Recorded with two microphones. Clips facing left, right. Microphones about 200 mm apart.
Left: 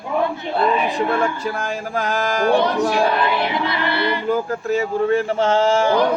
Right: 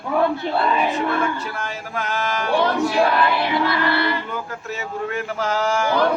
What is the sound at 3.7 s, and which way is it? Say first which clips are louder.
Speech: even; 20° left (ahead or behind).